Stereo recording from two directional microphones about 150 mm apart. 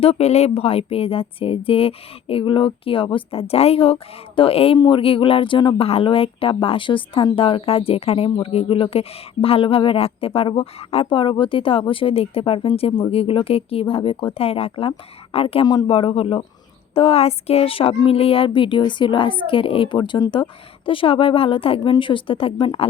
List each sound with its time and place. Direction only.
0.0 s speech: 45° left (ahead or behind)